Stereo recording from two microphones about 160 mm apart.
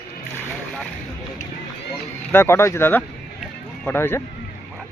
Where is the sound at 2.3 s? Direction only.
15° left (ahead or behind).